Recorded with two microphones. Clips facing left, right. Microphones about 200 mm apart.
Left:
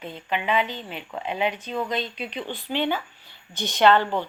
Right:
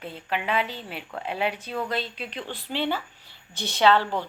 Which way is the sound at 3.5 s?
30° right (ahead or behind).